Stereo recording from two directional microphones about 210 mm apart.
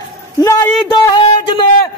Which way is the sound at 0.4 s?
20° left (ahead or behind).